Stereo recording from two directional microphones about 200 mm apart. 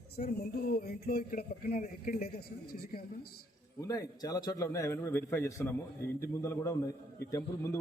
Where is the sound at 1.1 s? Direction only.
45° left (ahead or behind).